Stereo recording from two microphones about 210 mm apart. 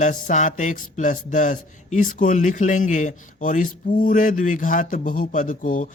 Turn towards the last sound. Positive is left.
turn(degrees=40)  # may be behind; listen again after turning